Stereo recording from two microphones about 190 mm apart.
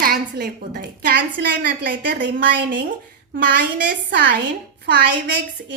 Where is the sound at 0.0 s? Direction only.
50° right (ahead or behind).